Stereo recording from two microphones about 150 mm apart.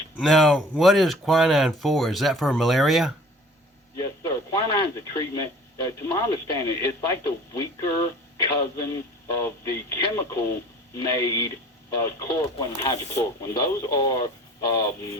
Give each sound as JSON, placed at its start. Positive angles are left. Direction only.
{"t": 0.2, "sound": "speech", "side_deg": 0}
{"t": 3.9, "sound": "speech", "side_deg": 20}